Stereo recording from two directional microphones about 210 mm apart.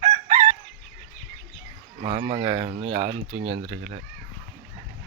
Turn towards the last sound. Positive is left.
turn(degrees=-25)  # may be behind; listen again after turning